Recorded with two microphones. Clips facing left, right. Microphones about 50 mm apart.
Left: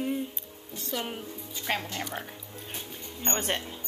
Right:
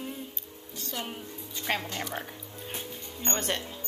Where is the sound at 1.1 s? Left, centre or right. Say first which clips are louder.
Left 2 dB; centre.